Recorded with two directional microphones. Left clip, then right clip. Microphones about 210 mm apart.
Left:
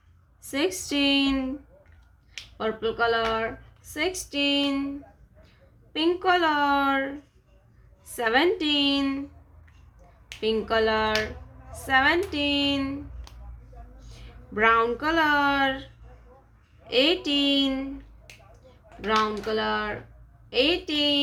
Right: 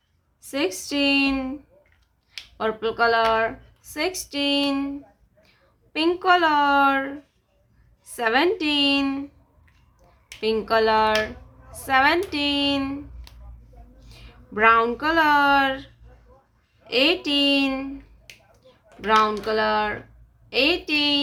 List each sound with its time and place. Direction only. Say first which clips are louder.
0.4 s speech: right 1 dB; 5° right (ahead or behind)
2.6 s speech: right 3 dB; 20° right (ahead or behind)
5.9 s speech: right 4 dB; 15° right (ahead or behind)
10.4 s speech: right 3 dB; 15° right (ahead or behind)
19.0 s speech: right 5 dB; 20° right (ahead or behind)